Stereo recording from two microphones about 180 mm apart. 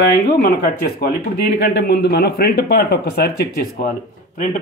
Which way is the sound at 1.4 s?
65° left (ahead or behind).